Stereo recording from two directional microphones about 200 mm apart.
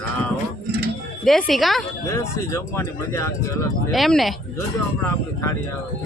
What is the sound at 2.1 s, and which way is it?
Speech, 15° left (ahead or behind).